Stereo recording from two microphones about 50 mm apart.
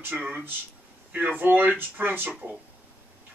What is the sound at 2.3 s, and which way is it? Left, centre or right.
Speech, right.